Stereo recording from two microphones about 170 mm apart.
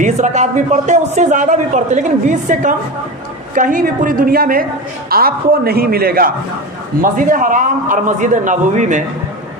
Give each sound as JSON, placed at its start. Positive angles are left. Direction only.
{"t": 0.0, "sound": "a man's voice", "side_deg": -45}